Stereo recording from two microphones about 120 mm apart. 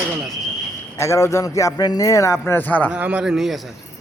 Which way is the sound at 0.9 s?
25° left (ahead or behind).